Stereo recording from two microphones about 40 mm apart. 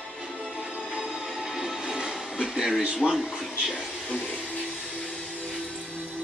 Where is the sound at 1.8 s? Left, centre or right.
Right.